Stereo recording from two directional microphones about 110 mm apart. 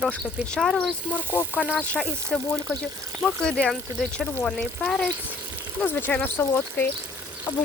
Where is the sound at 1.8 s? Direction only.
10° left (ahead or behind).